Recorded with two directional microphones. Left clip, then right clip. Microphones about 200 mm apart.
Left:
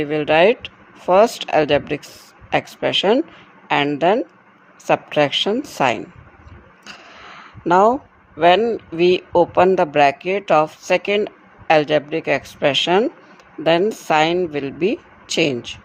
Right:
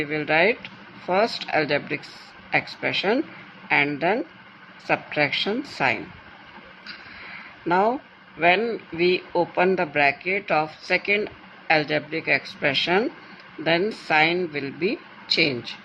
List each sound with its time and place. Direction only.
0.0 s a man's voice: 45° left (ahead or behind)
7.3 s a sound: 45° left (ahead or behind)
8.4 s a man's voice: 45° left (ahead or behind)